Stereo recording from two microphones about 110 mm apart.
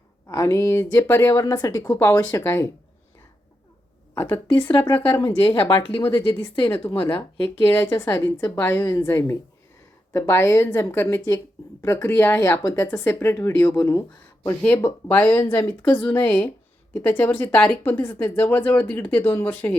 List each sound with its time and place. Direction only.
0.3 s speech: 30° left (ahead or behind)
2.0 s speech: 25° left (ahead or behind)
4.1 s speech: 20° left (ahead or behind)
5.6 s speech: 50° left (ahead or behind)
6.0 s speech: 25° left (ahead or behind)
6.9 s speech: 55° left (ahead or behind)
7.7 s speech: 20° left (ahead or behind)